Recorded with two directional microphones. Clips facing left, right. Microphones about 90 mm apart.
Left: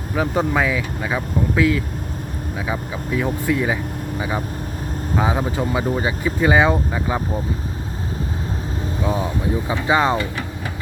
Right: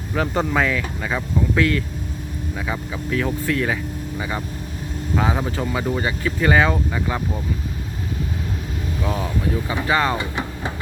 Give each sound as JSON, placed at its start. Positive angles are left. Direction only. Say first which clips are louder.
{"t": 0.2, "sound": "speech", "louder": "left 1 dB", "side_deg": 5}
{"t": 9.0, "sound": "speech", "louder": "left 2 dB", "side_deg": 20}
{"t": 10.2, "sound": "speech", "louder": "left 1 dB", "side_deg": -20}